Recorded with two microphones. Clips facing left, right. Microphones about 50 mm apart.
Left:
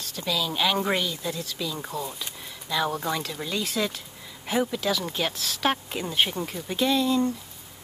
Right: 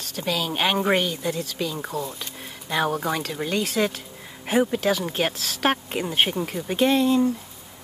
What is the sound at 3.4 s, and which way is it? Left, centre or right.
Speech, right.